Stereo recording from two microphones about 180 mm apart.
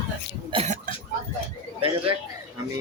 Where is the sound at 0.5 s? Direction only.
35° right (ahead or behind).